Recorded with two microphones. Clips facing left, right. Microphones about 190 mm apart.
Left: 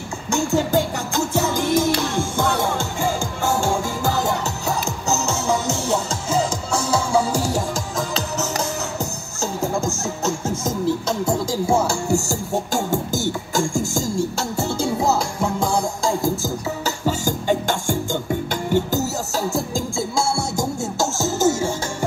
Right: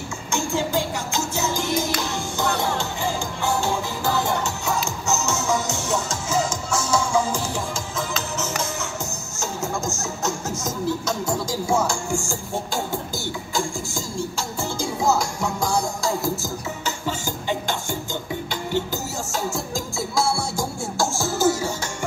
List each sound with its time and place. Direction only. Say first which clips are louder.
0.3 s music: left 5 dB; 40° left (ahead or behind)
15.1 s music: left 3 dB; 30° left (ahead or behind)
16.8 s music: left 6 dB; 45° left (ahead or behind); by 21.7 s 25° left (ahead or behind)